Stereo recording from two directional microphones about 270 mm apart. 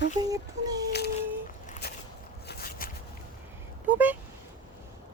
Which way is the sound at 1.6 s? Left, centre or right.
Left.